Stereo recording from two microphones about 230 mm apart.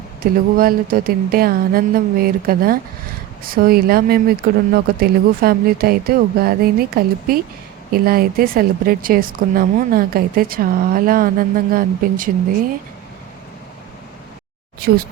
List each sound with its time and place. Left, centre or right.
0.2 s speech: right